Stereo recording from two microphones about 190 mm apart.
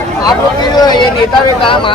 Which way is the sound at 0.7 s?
20° left (ahead or behind).